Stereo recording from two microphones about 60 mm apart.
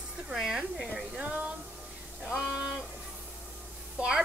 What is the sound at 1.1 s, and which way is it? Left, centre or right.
Music, centre.